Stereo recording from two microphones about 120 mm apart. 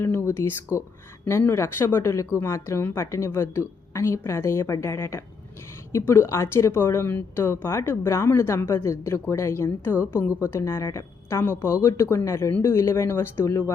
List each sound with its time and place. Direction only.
0.0 s speech: 20° left (ahead or behind)